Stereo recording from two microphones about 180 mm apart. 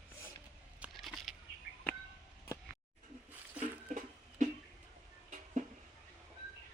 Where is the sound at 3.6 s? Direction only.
40° right (ahead or behind).